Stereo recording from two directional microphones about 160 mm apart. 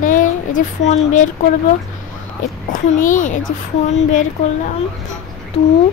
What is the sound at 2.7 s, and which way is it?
Speech, 55° left (ahead or behind).